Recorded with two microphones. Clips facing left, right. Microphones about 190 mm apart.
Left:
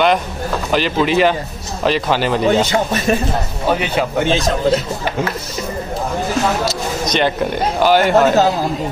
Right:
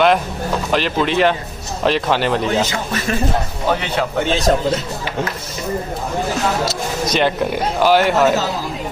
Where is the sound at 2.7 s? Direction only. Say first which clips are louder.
Left 6 dB; 25° left (ahead or behind).